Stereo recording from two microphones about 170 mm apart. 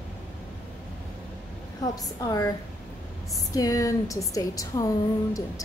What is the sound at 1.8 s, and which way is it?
Speech, 20° left (ahead or behind).